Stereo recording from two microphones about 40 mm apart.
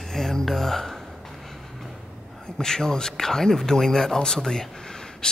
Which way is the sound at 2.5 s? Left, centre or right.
Centre.